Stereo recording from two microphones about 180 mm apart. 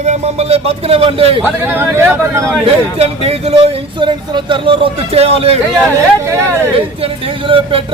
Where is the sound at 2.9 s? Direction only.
35° right (ahead or behind).